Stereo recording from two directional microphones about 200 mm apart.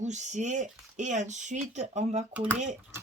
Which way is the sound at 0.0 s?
35° right (ahead or behind).